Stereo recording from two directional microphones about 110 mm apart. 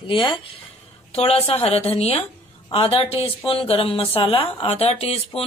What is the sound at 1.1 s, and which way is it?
Speech, 65° left (ahead or behind).